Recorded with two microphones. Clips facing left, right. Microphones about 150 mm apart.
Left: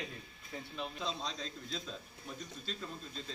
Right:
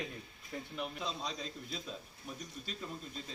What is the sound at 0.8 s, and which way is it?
A man's voice, 5° right (ahead or behind).